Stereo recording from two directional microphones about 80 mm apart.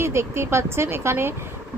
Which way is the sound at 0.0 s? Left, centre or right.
Right.